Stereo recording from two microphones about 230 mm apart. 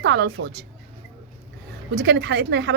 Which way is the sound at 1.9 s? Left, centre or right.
Right.